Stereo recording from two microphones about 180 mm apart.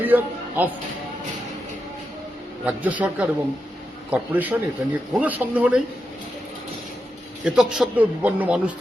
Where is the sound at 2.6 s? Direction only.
10° right (ahead or behind).